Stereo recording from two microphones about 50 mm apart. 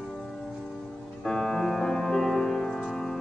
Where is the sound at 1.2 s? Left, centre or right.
Centre.